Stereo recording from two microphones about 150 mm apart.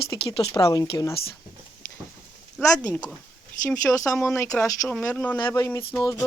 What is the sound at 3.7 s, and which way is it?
Speech, 20° left (ahead or behind).